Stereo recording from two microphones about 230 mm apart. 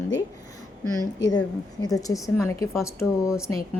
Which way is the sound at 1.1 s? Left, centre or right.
Centre.